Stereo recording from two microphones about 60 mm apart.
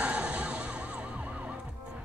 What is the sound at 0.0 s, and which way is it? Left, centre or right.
Emergency vehicle, centre.